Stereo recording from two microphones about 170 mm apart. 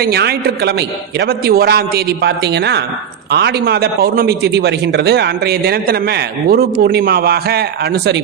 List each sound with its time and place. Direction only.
0.0 s a man's voice: 70° right (ahead or behind); by 2.8 s 90° right
3.3 s a man's voice: 75° right (ahead or behind)